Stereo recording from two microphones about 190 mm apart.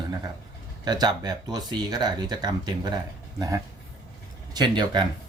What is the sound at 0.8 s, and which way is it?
Speech, 20° right (ahead or behind).